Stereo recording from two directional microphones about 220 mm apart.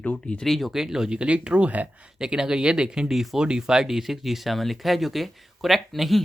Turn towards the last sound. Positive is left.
turn(degrees=0)  # may be behind; listen again after turning